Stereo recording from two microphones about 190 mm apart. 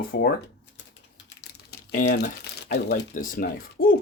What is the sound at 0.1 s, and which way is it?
Typing, 55° left (ahead or behind).